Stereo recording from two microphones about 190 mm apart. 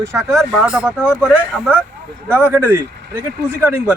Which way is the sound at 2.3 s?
10° right (ahead or behind).